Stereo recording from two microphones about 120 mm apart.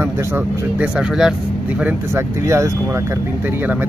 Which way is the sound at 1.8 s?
20° right (ahead or behind).